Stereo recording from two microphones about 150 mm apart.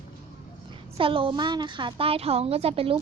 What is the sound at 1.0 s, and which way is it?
A woman's voice, 35° right (ahead or behind).